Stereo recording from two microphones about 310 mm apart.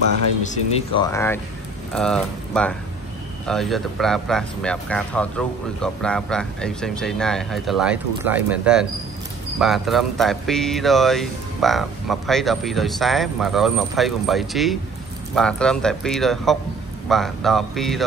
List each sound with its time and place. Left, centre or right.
0.9 s speech: centre